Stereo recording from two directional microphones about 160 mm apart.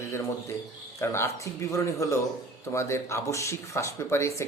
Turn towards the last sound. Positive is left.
turn(degrees=15)  # may be behind; listen again after turning